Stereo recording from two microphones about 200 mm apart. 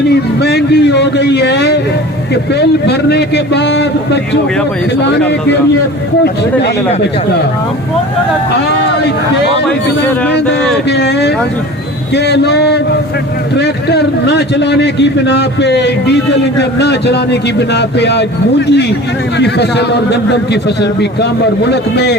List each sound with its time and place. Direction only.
0.1 s a man's voice: 55° left (ahead or behind)
10.8 s a man's voice: 55° left (ahead or behind)